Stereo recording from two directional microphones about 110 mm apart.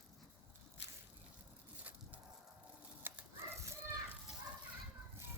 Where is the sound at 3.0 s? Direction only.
20° right (ahead or behind).